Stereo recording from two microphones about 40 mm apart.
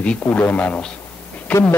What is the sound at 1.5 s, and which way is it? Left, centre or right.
Speech, left.